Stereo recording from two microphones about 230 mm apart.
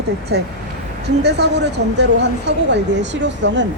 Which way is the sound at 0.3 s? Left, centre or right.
Right.